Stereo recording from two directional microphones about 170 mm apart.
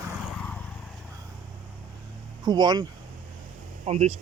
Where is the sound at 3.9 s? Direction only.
40° right (ahead or behind).